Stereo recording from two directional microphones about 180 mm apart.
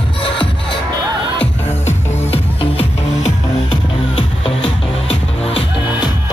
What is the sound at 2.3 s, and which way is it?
Music, 30° left (ahead or behind).